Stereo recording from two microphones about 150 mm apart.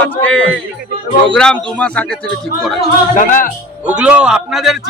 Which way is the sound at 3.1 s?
65° left (ahead or behind).